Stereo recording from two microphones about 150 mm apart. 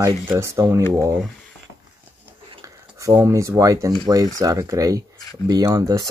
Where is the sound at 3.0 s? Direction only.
20° right (ahead or behind).